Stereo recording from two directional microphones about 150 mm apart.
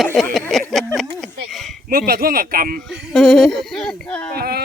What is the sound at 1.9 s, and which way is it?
Speech, 80° right.